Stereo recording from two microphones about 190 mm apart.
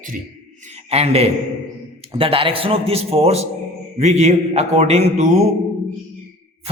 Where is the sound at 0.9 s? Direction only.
35° right (ahead or behind).